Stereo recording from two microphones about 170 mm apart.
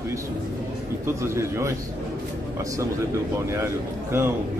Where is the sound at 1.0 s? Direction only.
15° right (ahead or behind).